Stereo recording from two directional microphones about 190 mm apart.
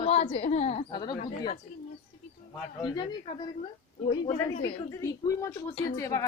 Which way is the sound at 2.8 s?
20° left (ahead or behind).